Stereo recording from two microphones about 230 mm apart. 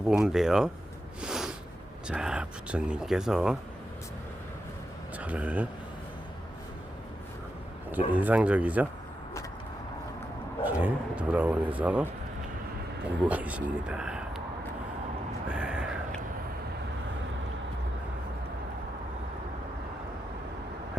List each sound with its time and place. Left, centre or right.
0.0 s speech: centre
1.2 s snort: centre
2.0 s speech: centre
5.1 s speech: centre
7.9 s speech: centre
10.6 s speech: centre
13.2 s speech: centre
15.4 s a sound: centre